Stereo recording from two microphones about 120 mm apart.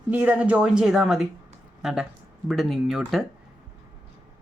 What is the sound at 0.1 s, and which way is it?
A woman's voice, 15° right (ahead or behind).